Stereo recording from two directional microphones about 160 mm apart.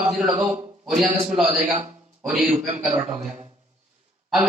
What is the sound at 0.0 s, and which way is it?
A man's voice, 5° right (ahead or behind).